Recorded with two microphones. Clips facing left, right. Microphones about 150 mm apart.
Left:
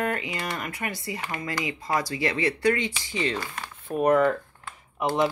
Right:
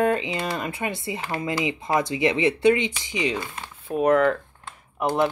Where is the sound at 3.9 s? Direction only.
Centre (ahead or behind).